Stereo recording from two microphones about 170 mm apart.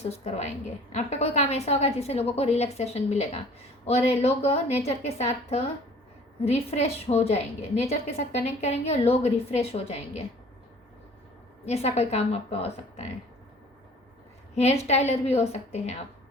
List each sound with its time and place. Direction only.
0.1 s a woman's voice: 40° left (ahead or behind)
11.6 s a woman's voice: 40° left (ahead or behind)
14.5 s a woman's voice: 40° left (ahead or behind)